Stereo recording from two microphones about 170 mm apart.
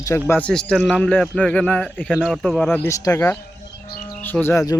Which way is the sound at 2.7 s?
15° left (ahead or behind).